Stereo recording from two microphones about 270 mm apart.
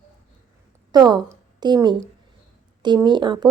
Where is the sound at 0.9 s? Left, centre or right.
Centre.